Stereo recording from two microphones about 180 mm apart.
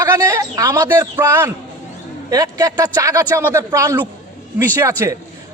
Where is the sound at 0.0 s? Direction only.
20° right (ahead or behind).